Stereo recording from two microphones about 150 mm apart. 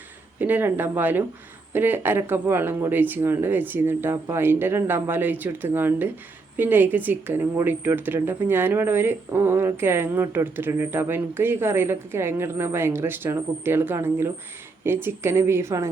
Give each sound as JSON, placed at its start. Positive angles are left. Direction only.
{"t": 0.3, "sound": "speech", "side_deg": -15}